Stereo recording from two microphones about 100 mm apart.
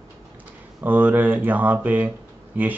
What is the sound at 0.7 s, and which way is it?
Speech, 15° right (ahead or behind).